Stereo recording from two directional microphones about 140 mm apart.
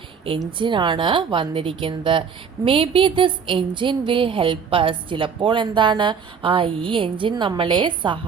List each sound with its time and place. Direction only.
0.3 s speech: 35° right (ahead or behind)